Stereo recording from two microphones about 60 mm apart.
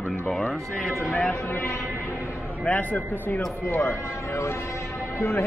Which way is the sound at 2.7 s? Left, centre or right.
Left.